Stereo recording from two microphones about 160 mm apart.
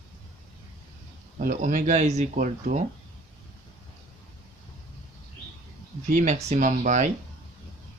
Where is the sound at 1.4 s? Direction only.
55° right (ahead or behind).